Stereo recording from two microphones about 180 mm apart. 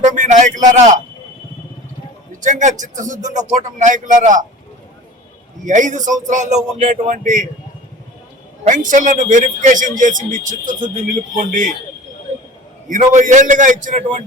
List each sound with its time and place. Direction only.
0.0 s a sound: 45° right (ahead or behind)
2.3 s speech: 45° right (ahead or behind)
5.6 s speech: 45° right (ahead or behind)
8.6 s speech: 45° right (ahead or behind)
12.9 s speech: 45° right (ahead or behind)